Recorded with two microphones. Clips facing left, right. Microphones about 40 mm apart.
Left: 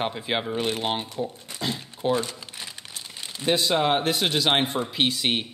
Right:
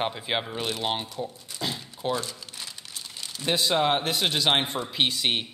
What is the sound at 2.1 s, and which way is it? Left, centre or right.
Crumpling, left.